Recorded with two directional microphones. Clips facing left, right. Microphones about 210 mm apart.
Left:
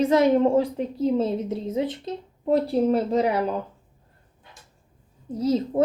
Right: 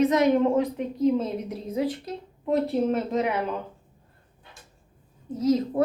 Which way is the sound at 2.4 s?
35° left (ahead or behind).